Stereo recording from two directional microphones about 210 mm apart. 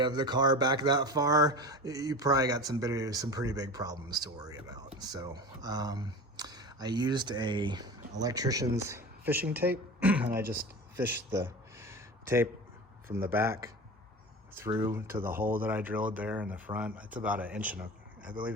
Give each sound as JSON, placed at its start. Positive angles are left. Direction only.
{"t": 0.0, "sound": "speech", "side_deg": -20}
{"t": 10.9, "sound": "a sound", "side_deg": -10}
{"t": 13.1, "sound": "speech", "side_deg": -10}